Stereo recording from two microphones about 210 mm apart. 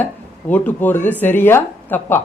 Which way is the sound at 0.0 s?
10° left (ahead or behind).